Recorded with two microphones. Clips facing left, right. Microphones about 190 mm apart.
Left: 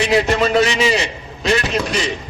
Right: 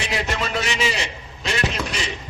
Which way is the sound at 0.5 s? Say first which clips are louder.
Left 9 dB; 35° left (ahead or behind).